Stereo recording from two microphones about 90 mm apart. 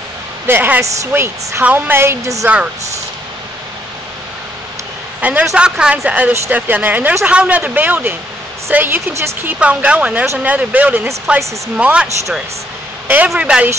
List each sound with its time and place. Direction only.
0.5 s a woman's voice: 20° right (ahead or behind)
5.2 s a man's voice: 15° right (ahead or behind)
13.4 s speech: 15° right (ahead or behind)